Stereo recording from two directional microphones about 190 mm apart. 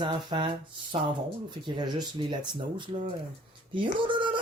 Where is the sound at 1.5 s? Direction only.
25° right (ahead or behind).